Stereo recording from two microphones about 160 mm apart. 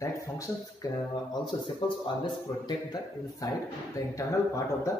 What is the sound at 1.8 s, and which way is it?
Speech, 30° left (ahead or behind).